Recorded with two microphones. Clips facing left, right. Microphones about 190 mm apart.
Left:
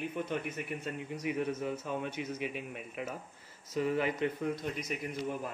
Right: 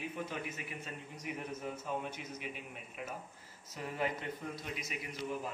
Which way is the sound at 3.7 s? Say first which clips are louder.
Left 7 dB; 75° left (ahead or behind).